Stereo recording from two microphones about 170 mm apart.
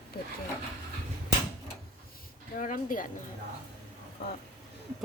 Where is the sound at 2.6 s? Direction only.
50° left (ahead or behind).